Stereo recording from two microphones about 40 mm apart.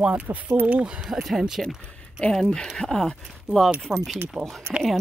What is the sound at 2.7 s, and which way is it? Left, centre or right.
Speech, centre.